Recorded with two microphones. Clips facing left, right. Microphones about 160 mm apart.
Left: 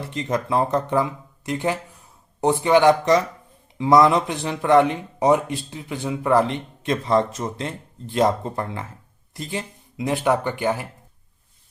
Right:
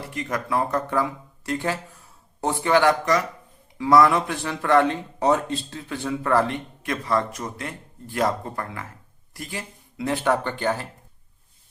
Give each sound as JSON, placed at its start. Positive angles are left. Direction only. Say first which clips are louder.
{"t": 0.1, "sound": "speech", "louder": "left 3 dB", "side_deg": 25}